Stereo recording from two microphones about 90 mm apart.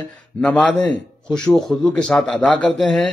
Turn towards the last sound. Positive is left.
turn(degrees=5)  # may be behind; listen again after turning